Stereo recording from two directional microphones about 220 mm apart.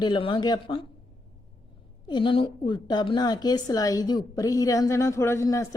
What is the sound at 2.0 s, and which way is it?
A woman's voice, 20° left (ahead or behind).